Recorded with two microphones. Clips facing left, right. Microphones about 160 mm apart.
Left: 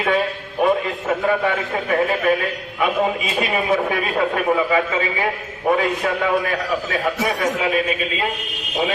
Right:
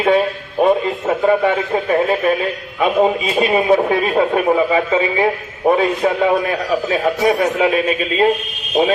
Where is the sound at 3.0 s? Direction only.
30° right (ahead or behind).